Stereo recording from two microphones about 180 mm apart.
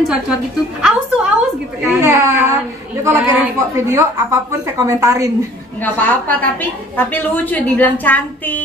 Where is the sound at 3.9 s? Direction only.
15° right (ahead or behind).